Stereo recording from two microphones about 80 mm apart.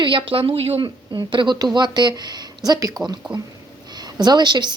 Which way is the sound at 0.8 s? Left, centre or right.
Right.